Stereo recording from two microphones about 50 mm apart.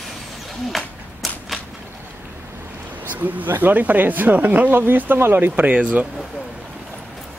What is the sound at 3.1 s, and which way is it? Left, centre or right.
Speech, right.